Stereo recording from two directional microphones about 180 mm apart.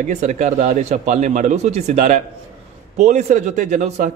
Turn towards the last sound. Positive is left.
turn(degrees=-40)  # may be behind; listen again after turning